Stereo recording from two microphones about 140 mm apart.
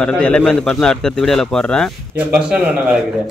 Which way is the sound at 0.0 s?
10° left (ahead or behind).